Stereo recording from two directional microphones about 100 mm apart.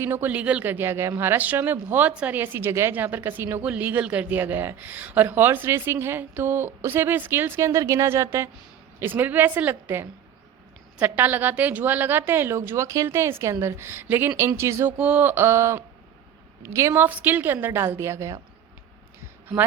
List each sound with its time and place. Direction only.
0.0 s speech: 20° right (ahead or behind)
14.9 s speech: 15° right (ahead or behind)
17.1 s speech: 15° right (ahead or behind)